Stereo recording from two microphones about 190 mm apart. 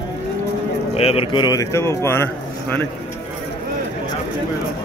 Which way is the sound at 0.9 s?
35° left (ahead or behind).